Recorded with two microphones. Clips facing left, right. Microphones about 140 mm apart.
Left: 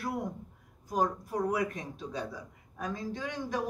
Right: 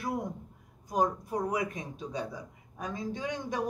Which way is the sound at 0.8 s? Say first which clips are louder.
Right 1 dB; 15° right (ahead or behind).